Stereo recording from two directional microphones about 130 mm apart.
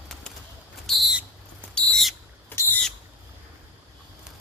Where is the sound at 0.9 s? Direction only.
Centre (ahead or behind).